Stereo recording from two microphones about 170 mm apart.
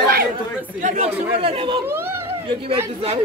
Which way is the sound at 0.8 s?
40° right (ahead or behind).